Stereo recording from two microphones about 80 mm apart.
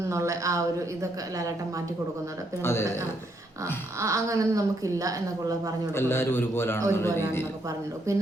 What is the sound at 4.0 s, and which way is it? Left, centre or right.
A woman's voice, right.